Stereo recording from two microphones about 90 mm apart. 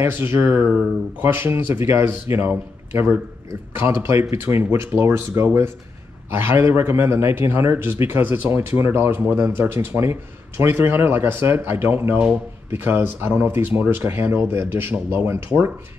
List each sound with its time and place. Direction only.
0.0 s speech: 25° right (ahead or behind)